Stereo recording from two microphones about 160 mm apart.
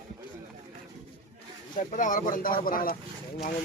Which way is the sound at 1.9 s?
55° left (ahead or behind).